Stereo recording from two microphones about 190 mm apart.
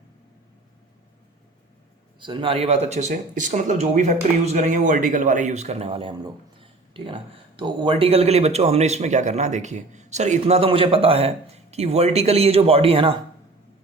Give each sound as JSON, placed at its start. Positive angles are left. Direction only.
{"t": 2.2, "sound": "speech", "side_deg": -25}